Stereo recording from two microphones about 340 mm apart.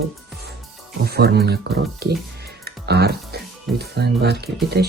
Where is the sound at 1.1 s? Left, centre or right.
Right.